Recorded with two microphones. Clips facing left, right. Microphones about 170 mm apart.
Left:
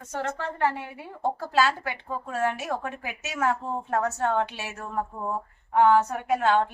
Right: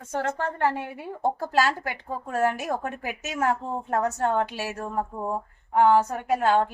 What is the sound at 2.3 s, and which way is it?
A woman's voice, 45° right (ahead or behind).